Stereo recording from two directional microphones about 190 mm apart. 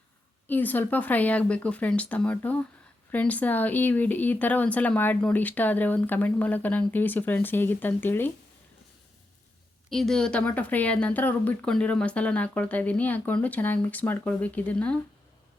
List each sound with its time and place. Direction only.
0.4 s speech: 10° left (ahead or behind)
9.9 s speech: centre (ahead or behind)